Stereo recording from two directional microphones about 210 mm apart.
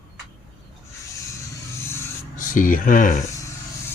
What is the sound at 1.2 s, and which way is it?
Vehicle, 15° left (ahead or behind).